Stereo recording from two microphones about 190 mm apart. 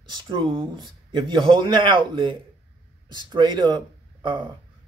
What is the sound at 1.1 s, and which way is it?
Speech, 25° right (ahead or behind).